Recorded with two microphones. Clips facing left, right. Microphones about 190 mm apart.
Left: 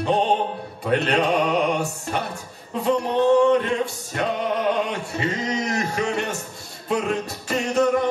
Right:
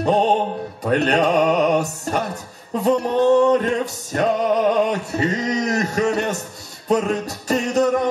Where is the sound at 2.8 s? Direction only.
40° right (ahead or behind).